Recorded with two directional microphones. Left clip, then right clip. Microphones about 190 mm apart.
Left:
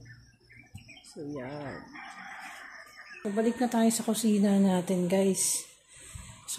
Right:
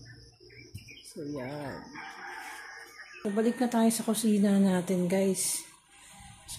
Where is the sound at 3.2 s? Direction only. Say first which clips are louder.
Even; centre (ahead or behind).